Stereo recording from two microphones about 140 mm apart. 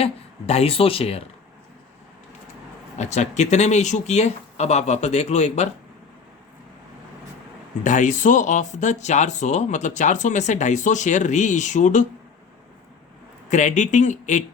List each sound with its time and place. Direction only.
0.0 s speech: 45° left (ahead or behind)
3.0 s speech: 55° left (ahead or behind)
7.9 s speech: 60° left (ahead or behind)
13.5 s speech: 60° left (ahead or behind)